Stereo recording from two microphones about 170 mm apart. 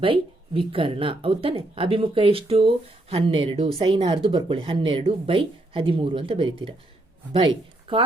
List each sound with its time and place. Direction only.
0.0 s speech: 30° right (ahead or behind)